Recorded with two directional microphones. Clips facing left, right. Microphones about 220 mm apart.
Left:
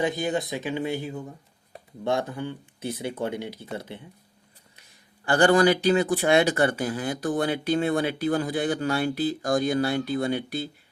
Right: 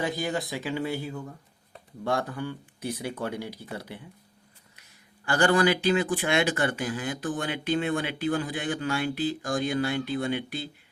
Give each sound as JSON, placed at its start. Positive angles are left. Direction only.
{"t": 0.0, "sound": "speech", "side_deg": 20}